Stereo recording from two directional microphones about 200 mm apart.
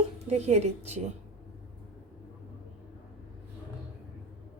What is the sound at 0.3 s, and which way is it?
Speech, 35° right (ahead or behind).